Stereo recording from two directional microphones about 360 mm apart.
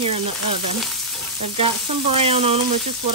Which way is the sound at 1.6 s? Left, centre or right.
Centre.